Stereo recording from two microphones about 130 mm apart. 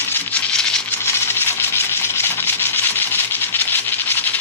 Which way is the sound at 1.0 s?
20° left (ahead or behind).